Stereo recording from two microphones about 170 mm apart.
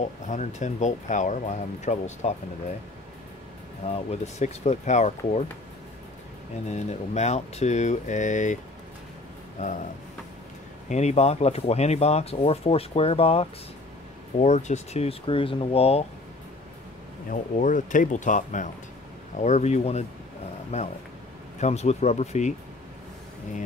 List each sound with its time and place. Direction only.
0.2 s speech: 45° left (ahead or behind)
3.9 s speech: 40° left (ahead or behind)
6.7 s speech: 40° left (ahead or behind)
9.6 s speech: 45° left (ahead or behind)
10.9 s speech: 40° left (ahead or behind)
17.3 s speech: 50° left (ahead or behind)